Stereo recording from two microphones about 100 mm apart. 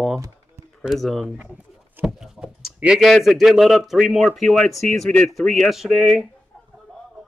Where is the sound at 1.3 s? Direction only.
15° right (ahead or behind).